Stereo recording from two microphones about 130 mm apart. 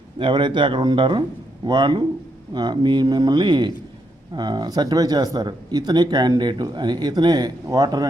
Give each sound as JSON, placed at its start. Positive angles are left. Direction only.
{"t": 0.2, "sound": "speech", "side_deg": -40}